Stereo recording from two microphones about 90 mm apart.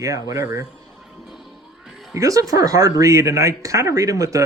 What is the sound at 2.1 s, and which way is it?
Speech, 40° right (ahead or behind).